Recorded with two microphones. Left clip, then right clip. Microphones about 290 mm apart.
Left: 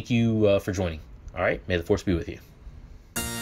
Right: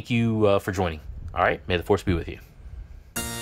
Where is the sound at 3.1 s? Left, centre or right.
Centre.